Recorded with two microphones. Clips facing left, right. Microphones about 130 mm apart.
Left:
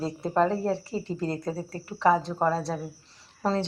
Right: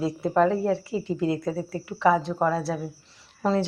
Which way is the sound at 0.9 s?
5° right (ahead or behind).